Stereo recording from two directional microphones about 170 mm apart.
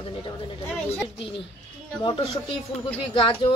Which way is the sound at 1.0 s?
30° left (ahead or behind).